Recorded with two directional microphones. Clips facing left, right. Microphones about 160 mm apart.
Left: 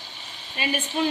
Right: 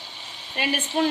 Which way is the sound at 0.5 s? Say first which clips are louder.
Right 2 dB; 65° right (ahead or behind).